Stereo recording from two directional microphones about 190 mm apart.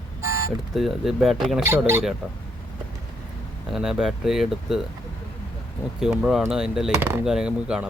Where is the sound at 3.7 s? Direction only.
Centre (ahead or behind).